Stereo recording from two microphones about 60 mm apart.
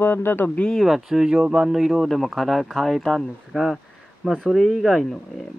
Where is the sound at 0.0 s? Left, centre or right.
Left.